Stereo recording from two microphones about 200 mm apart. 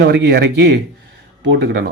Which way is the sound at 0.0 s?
55° right (ahead or behind).